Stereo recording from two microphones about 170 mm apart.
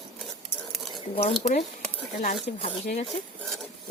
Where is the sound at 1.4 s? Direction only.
40° left (ahead or behind).